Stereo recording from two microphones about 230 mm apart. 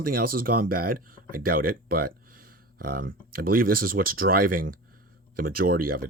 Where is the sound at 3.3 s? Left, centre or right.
Right.